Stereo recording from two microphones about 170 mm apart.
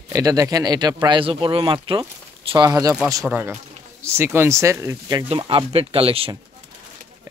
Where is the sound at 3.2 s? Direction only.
10° right (ahead or behind).